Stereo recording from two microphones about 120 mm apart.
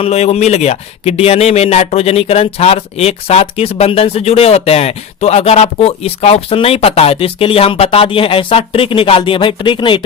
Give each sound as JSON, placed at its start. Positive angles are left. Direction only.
{"t": 0.0, "sound": "speech", "side_deg": 60}